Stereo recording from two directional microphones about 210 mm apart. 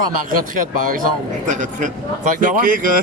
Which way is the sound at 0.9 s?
40° right (ahead or behind).